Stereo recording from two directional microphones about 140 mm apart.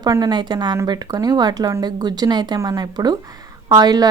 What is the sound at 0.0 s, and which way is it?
A woman's voice, 30° right (ahead or behind).